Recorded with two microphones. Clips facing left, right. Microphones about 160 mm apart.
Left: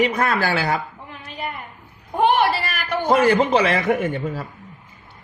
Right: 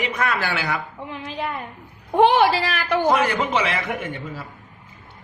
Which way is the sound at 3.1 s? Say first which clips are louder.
Left 5 dB; 30° left (ahead or behind).